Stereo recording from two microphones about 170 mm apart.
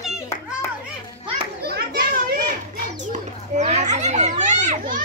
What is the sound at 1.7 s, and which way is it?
Children playing, 65° right (ahead or behind).